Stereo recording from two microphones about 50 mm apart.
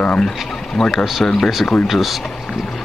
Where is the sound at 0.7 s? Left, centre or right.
Centre.